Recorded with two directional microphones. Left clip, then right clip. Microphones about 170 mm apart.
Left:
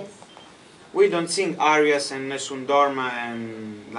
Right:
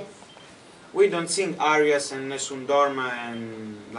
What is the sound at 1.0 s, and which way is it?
Speech, centre (ahead or behind).